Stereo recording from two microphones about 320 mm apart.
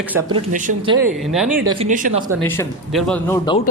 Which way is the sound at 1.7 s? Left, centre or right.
Centre.